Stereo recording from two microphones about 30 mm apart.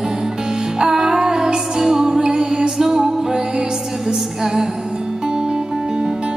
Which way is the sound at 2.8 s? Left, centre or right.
Centre.